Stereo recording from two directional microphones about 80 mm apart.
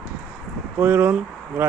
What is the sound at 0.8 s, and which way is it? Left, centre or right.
Speech, right.